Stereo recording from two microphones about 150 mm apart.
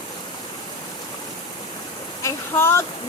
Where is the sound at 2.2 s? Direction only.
20° left (ahead or behind).